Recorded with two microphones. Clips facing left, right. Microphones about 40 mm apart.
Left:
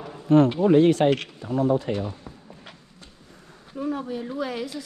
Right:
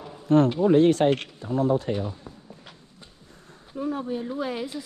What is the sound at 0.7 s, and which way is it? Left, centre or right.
Speech, left.